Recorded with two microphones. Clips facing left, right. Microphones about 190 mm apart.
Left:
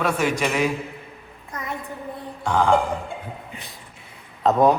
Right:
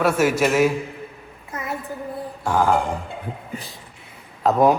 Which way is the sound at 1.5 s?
5° right (ahead or behind).